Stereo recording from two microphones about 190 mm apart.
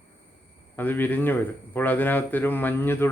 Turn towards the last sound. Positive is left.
turn(degrees=10)  # may be behind; listen again after turning